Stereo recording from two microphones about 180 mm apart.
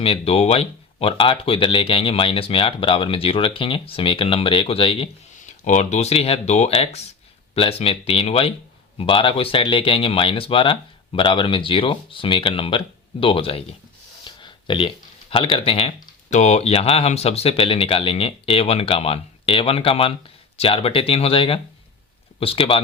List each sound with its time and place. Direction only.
0.0 s speech: 35° left (ahead or behind)
5.6 s speech: 40° left (ahead or behind)